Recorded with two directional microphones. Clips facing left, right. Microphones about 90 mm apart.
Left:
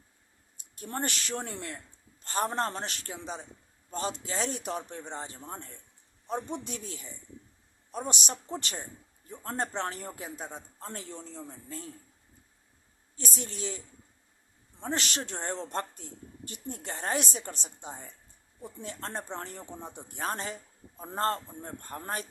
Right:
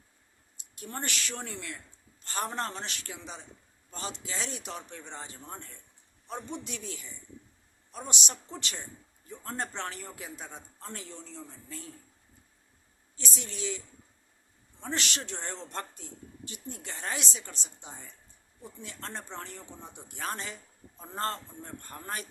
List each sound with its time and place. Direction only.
0.8 s a man's voice: 40° left (ahead or behind)
13.1 s a man's voice: 40° left (ahead or behind)